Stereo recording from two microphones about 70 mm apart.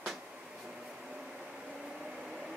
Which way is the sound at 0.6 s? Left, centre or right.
Centre.